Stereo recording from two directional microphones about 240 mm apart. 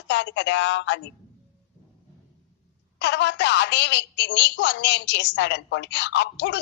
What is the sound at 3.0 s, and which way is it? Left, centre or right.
A woman's voice, left.